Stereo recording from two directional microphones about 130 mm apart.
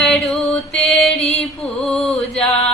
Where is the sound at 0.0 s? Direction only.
Centre (ahead or behind).